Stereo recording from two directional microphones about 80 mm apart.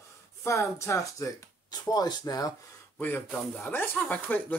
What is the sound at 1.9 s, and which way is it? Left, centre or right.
Speech, left.